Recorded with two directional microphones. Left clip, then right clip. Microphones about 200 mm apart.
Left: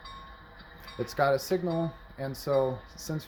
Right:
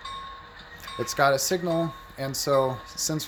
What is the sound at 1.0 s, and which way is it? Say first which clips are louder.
Speech: right 4 dB; 10° right (ahead or behind).